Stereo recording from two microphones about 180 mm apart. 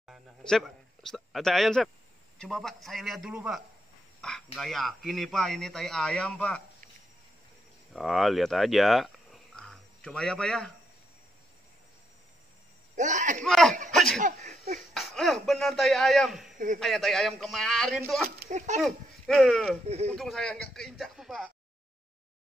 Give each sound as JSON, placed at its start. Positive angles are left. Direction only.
{"t": 0.0, "sound": "a sound", "side_deg": 0}
{"t": 2.3, "sound": "a man's voice", "side_deg": 5}
{"t": 7.9, "sound": "speech", "side_deg": 0}
{"t": 12.9, "sound": "speech", "side_deg": -45}
{"t": 13.4, "sound": "a man's voice", "side_deg": 5}
{"t": 13.9, "sound": "cough", "side_deg": 0}
{"t": 14.2, "sound": "laughter", "side_deg": -40}
{"t": 15.0, "sound": "speech", "side_deg": 0}
{"t": 16.5, "sound": "a man's voice", "side_deg": -45}
{"t": 16.8, "sound": "a man's voice", "side_deg": 0}
{"t": 19.9, "sound": "a man's voice", "side_deg": -35}
{"t": 20.2, "sound": "a man's voice", "side_deg": 0}